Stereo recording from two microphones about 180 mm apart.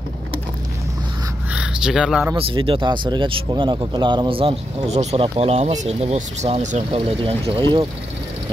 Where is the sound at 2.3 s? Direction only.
30° right (ahead or behind).